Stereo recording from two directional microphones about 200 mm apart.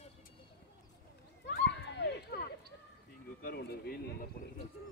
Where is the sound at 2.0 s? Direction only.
55° left (ahead or behind).